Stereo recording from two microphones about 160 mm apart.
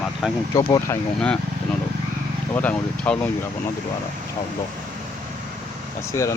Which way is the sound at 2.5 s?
10° left (ahead or behind).